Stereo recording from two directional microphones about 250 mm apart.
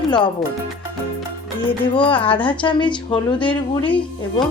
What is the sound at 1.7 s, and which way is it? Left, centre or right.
Speech, centre.